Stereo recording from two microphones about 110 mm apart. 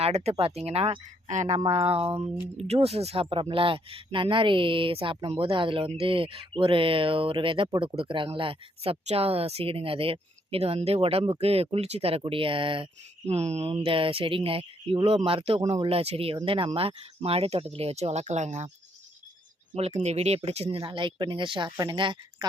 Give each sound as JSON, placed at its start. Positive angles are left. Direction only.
{"t": 0.0, "sound": "speech", "side_deg": -75}
{"t": 1.7, "sound": "speech", "side_deg": -65}
{"t": 13.2, "sound": "speech", "side_deg": -80}
{"t": 13.8, "sound": "speech", "side_deg": -55}
{"t": 16.4, "sound": "speech", "side_deg": -45}
{"t": 19.7, "sound": "speech", "side_deg": -80}